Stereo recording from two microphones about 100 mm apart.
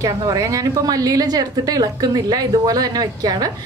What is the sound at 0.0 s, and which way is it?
A woman's voice, 35° right (ahead or behind).